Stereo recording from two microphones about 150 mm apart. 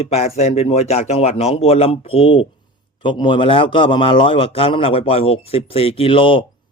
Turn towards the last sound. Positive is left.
turn(degrees=35)  # may be behind; listen again after turning